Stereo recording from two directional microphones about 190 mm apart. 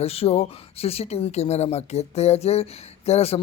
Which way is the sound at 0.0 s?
30° left (ahead or behind).